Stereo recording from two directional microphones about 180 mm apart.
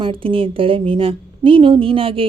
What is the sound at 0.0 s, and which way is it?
A woman's voice, 30° right (ahead or behind).